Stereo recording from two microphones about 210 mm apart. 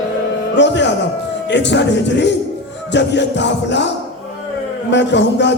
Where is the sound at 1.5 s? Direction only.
55° left (ahead or behind).